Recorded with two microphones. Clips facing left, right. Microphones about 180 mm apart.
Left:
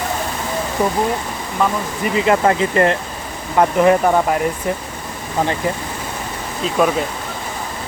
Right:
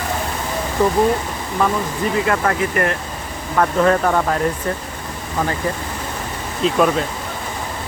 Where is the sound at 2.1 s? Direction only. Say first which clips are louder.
Left 5 dB; 20° left (ahead or behind).